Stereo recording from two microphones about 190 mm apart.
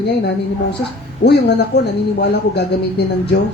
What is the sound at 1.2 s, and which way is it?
Speech, 60° left (ahead or behind).